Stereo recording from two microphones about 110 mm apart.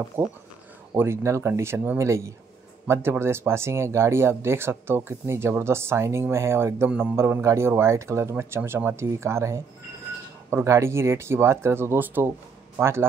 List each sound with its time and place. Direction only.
0.9 s speech: 25° right (ahead or behind)
6.9 s a man's voice: 10° right (ahead or behind)